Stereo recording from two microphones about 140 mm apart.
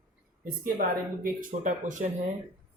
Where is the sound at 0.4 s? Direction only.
80° right.